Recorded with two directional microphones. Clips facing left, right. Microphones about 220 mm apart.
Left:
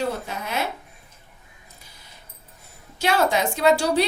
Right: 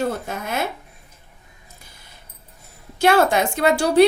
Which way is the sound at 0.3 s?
50° right (ahead or behind).